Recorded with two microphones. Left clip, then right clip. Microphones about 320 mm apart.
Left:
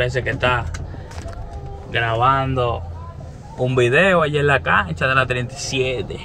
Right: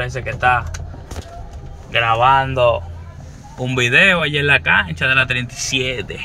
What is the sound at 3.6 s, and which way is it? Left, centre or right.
Speech, right.